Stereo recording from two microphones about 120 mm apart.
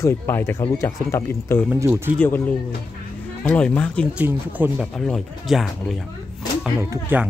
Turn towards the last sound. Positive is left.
turn(degrees=-20)  # may be behind; listen again after turning